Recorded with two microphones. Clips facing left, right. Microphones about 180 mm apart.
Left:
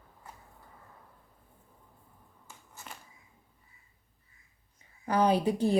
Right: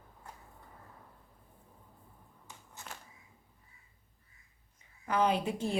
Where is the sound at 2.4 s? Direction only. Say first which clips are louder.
Even; centre (ahead or behind).